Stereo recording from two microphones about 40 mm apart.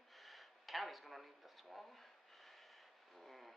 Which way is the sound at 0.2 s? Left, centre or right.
Centre.